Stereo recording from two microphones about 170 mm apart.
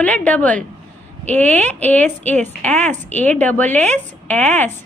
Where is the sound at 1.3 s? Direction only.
40° right (ahead or behind).